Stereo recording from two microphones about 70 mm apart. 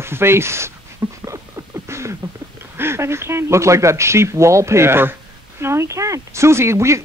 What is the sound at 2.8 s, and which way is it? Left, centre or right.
Speech, right.